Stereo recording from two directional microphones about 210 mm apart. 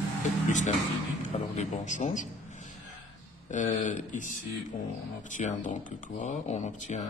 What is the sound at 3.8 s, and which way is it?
A man's voice, 35° left (ahead or behind).